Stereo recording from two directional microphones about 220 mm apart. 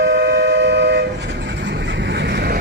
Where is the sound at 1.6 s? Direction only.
50° right (ahead or behind).